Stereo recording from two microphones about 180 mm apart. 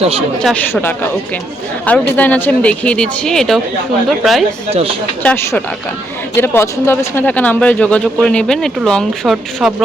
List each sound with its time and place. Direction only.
0.0 s speech: 35° right (ahead or behind)
0.4 s speech: 10° left (ahead or behind)
4.7 s speech: 30° right (ahead or behind)
5.2 s speech: 10° left (ahead or behind)